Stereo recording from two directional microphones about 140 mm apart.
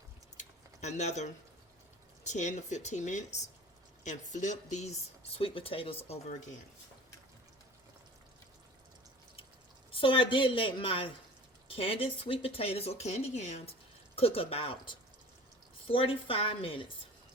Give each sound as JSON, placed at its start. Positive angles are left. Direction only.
{"t": 0.3, "sound": "a sound", "side_deg": 55}
{"t": 2.2, "sound": "speech", "side_deg": 60}
{"t": 5.4, "sound": "a woman's voice", "side_deg": 40}
{"t": 9.9, "sound": "a woman's voice", "side_deg": 40}
{"t": 14.2, "sound": "a woman's voice", "side_deg": 45}